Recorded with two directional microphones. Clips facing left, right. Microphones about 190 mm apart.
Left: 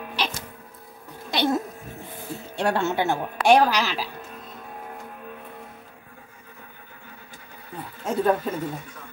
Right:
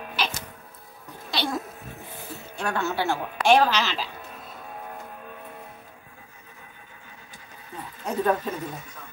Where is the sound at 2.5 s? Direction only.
30° left (ahead or behind); by 4.1 s 15° left (ahead or behind).